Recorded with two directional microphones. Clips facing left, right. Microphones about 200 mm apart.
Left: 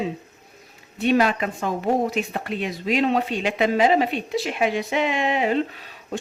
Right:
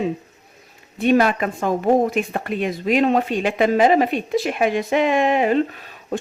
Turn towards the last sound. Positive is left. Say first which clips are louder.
# right 4 dB
turn(degrees=-50)  # may be behind; listen again after turning